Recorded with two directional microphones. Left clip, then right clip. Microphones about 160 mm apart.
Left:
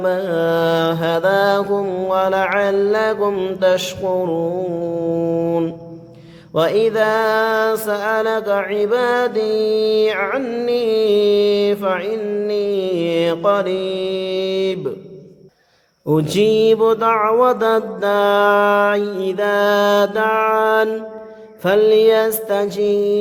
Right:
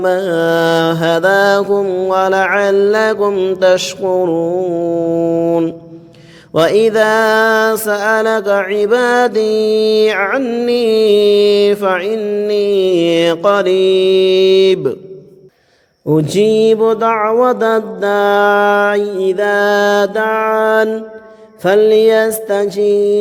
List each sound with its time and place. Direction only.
0.0 s mantra: 40° right (ahead or behind)
6.5 s mantra: 45° right (ahead or behind)
10.4 s mantra: 30° right (ahead or behind)
10.7 s mantra: 45° right (ahead or behind)
12.2 s mantra: 30° right (ahead or behind)
12.5 s mantra: 45° right (ahead or behind)
16.0 s mantra: 25° right (ahead or behind)